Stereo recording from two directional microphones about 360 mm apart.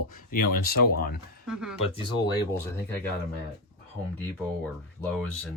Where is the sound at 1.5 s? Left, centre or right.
Centre.